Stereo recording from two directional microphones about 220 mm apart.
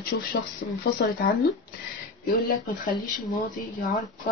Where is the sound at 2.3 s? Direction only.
40° left (ahead or behind).